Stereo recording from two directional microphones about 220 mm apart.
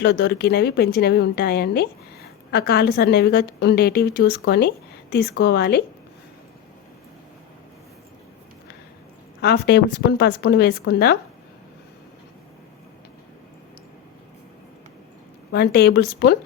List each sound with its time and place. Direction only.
0.0 s a woman's voice: 50° left (ahead or behind)
9.4 s a woman's voice: 50° left (ahead or behind)
15.5 s a woman's voice: 45° left (ahead or behind)